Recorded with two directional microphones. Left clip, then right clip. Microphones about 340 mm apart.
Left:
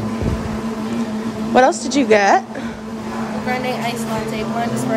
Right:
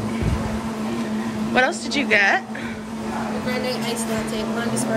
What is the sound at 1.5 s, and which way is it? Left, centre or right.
Speech, centre.